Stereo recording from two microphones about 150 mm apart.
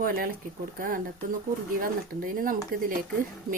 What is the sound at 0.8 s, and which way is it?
Speech, 70° right (ahead or behind).